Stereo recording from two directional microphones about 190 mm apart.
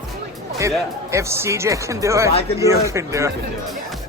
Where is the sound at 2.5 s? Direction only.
15° right (ahead or behind).